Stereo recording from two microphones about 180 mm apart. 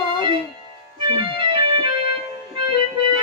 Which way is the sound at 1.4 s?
30° right (ahead or behind).